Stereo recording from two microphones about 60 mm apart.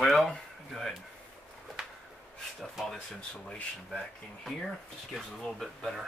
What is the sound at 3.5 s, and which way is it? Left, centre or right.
Speech, centre.